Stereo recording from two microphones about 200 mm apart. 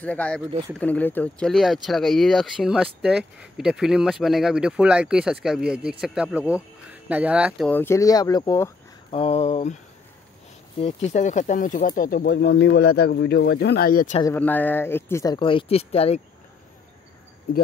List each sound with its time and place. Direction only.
0.0 s speech: 5° left (ahead or behind)
9.1 s a sound: 30° left (ahead or behind)
10.8 s speech: 30° left (ahead or behind); by 14.1 s 45° left (ahead or behind)
14.2 s speech: 10° left (ahead or behind); by 16.2 s 30° left (ahead or behind)